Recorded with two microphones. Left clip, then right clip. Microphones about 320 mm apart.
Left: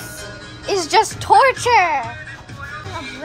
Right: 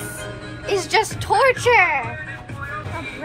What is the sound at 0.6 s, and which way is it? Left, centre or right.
Speech, left.